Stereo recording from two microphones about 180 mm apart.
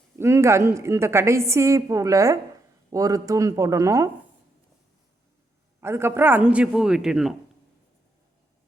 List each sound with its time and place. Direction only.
0.2 s a woman's voice: 15° right (ahead or behind)
5.8 s a woman's voice: 15° right (ahead or behind)